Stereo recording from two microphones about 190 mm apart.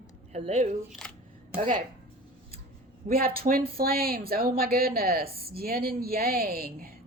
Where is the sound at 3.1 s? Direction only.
50° right (ahead or behind).